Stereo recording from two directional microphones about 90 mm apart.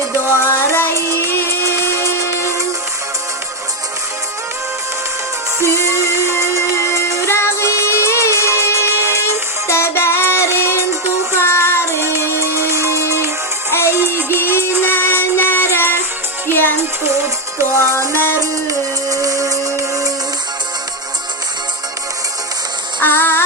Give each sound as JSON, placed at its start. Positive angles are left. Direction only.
{"t": 0.0, "sound": "music", "side_deg": -25}
{"t": 0.4, "sound": "music", "side_deg": 30}
{"t": 5.7, "sound": "music", "side_deg": 30}
{"t": 11.9, "sound": "music", "side_deg": -30}
{"t": 14.3, "sound": "music", "side_deg": 25}
{"t": 17.0, "sound": "music", "side_deg": -30}
{"t": 18.3, "sound": "music", "side_deg": -40}
{"t": 23.0, "sound": "music", "side_deg": 25}